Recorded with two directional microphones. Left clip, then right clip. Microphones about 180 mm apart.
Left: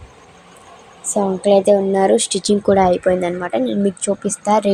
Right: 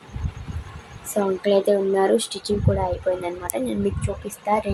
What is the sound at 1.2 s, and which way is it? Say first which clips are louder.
A woman's voice: left 5 dB; 15° left (ahead or behind).